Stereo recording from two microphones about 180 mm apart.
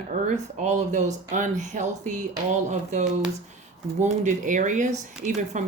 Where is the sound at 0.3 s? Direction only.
40° right (ahead or behind).